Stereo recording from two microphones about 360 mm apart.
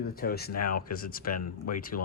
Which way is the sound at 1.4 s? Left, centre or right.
Left.